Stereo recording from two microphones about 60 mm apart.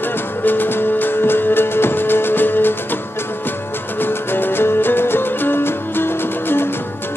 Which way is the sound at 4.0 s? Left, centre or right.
Left.